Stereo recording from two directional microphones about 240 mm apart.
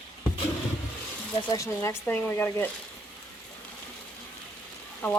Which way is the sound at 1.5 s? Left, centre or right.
Centre.